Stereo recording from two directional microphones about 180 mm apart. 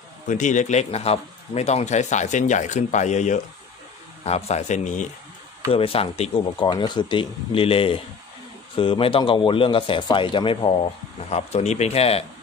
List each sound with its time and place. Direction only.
0.3 s speech: 45° left (ahead or behind)